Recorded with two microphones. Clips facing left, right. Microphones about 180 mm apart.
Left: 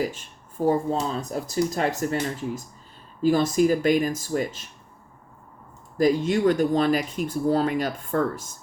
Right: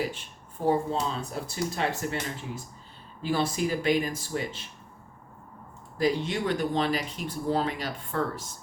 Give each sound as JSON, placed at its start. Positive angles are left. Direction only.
{"t": 0.1, "sound": "speech", "side_deg": 45}
{"t": 3.2, "sound": "speech", "side_deg": 45}
{"t": 6.0, "sound": "speech", "side_deg": 45}